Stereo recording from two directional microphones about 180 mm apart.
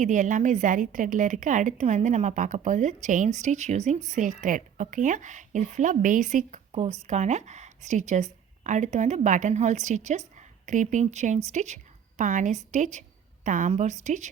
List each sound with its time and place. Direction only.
0.0 s a woman's voice: 45° right (ahead or behind)